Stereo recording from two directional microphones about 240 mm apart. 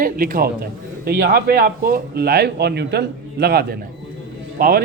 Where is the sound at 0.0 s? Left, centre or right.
Right.